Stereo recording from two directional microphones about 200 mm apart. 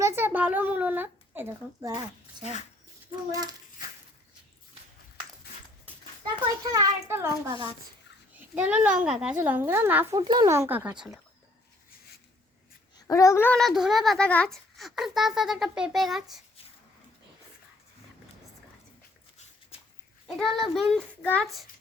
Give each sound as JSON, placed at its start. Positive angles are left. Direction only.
{"t": 0.2, "sound": "a child's voice", "side_deg": -10}
{"t": 3.3, "sound": "child singing", "side_deg": -20}
{"t": 6.6, "sound": "a child's voice", "side_deg": -20}
{"t": 8.5, "sound": "a child's voice", "side_deg": -5}
{"t": 13.1, "sound": "a child's voice", "side_deg": 15}
{"t": 20.2, "sound": "a child's voice", "side_deg": 0}